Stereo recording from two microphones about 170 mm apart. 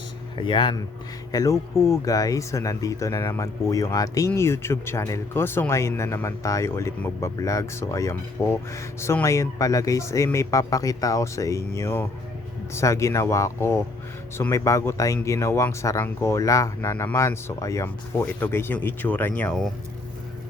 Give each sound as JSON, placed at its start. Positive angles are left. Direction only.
{"t": 0.3, "sound": "speech", "side_deg": 30}